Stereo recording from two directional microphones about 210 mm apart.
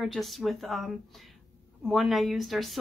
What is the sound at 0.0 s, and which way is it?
Speech, centre (ahead or behind).